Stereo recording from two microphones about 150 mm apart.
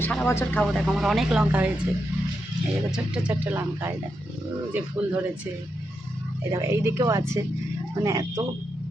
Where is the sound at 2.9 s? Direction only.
5° right (ahead or behind).